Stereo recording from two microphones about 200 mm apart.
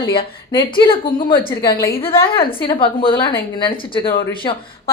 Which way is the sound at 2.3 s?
25° left (ahead or behind).